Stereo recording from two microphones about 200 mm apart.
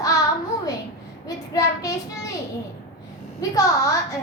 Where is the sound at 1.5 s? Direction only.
15° left (ahead or behind).